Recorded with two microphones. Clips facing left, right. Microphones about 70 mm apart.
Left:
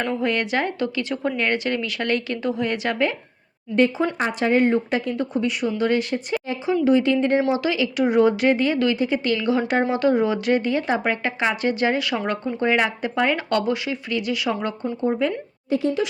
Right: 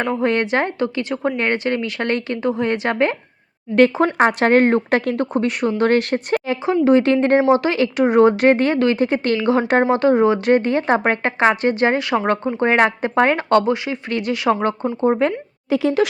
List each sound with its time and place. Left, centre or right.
0.0 s a woman's voice: right
0.3 s speech: right
3.8 s speech: right
4.0 s a woman's voice: right
14.1 s a woman's voice: right
15.7 s speech: right